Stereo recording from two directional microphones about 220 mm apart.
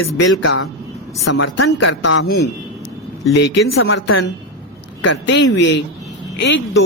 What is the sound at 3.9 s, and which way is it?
Speech, 65° left (ahead or behind).